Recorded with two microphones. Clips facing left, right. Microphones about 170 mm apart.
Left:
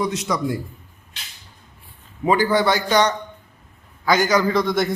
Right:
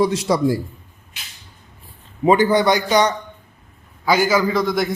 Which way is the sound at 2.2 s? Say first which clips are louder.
Right 3 dB; 20° right (ahead or behind).